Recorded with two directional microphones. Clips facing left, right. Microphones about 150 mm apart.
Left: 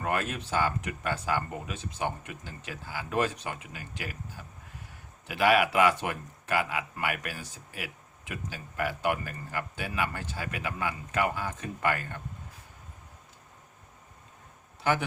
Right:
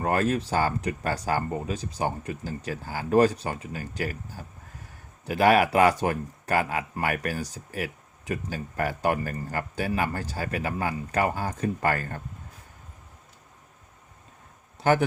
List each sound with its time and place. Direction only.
0.0 s speech: 35° right (ahead or behind)